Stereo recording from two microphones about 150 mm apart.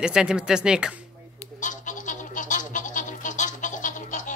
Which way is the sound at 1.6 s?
60° left (ahead or behind).